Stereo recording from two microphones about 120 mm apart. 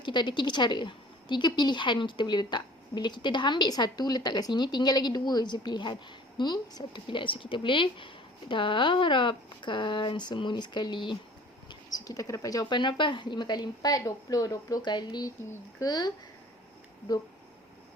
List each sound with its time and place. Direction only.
0.0 s a woman's voice: 40° left (ahead or behind)
11.7 s a woman's voice: 30° left (ahead or behind)